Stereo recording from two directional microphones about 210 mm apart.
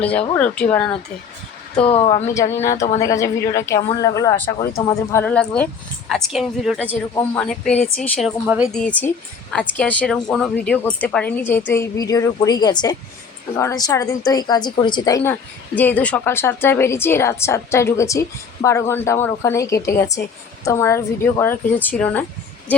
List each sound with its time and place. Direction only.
0.0 s a woman's voice: 5° left (ahead or behind)
1.7 s speech: 25° left (ahead or behind)
2.3 s a woman's voice: 15° left (ahead or behind)
2.7 s speech: 35° left (ahead or behind)
3.0 s a woman's voice: 15° left (ahead or behind)